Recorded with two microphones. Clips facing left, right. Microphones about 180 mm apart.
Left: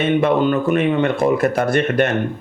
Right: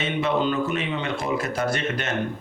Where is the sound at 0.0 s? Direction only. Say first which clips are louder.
Left 8 dB; 55° left (ahead or behind).